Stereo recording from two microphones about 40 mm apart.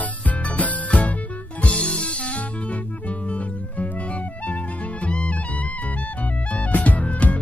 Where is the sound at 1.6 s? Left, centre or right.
Left.